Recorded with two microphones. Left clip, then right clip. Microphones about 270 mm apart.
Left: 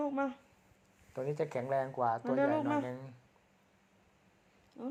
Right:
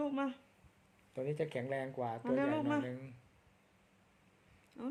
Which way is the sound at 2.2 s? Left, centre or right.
Centre.